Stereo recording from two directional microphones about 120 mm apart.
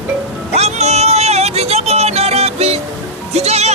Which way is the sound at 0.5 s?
65° right (ahead or behind).